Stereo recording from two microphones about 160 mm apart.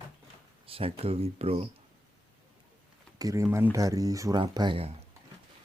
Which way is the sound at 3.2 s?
20° right (ahead or behind).